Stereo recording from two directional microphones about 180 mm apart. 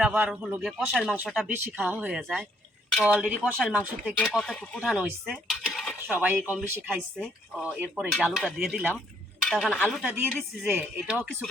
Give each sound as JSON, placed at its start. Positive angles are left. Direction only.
{"t": 0.0, "sound": "speech", "side_deg": -5}
{"t": 4.2, "sound": "speech", "side_deg": 5}